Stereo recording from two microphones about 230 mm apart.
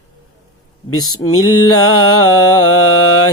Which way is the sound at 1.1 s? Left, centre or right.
Left.